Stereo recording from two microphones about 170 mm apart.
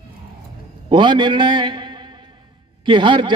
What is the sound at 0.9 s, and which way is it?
A man's voice, 25° right (ahead or behind).